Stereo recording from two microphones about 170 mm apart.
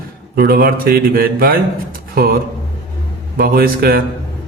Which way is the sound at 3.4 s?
60° right (ahead or behind).